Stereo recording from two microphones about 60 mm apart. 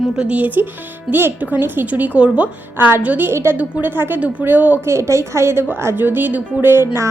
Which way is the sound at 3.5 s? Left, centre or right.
Right.